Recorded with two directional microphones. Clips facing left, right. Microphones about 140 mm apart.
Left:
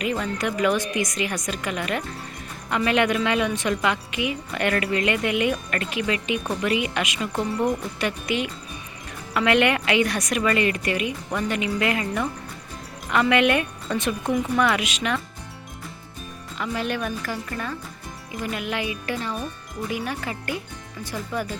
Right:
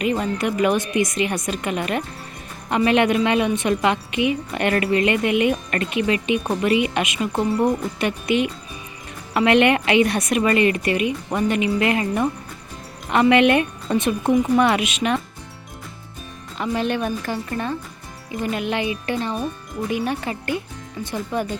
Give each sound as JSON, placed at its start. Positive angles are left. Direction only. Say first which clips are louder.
{"t": 0.0, "sound": "speech", "louder": "right 4 dB", "side_deg": -25}
{"t": 16.6, "sound": "speech", "louder": "right 4 dB", "side_deg": -25}